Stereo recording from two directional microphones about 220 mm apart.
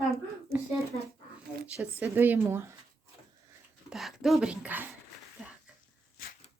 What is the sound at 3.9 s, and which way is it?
A woman's voice, centre (ahead or behind).